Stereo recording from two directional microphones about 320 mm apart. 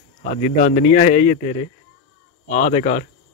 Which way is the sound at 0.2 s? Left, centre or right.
Left.